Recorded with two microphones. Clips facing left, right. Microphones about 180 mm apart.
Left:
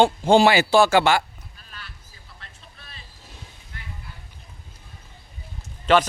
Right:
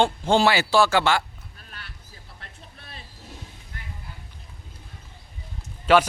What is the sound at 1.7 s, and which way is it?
Vehicle, 60° right (ahead or behind).